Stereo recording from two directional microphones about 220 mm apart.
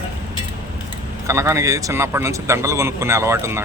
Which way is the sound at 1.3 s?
15° right (ahead or behind).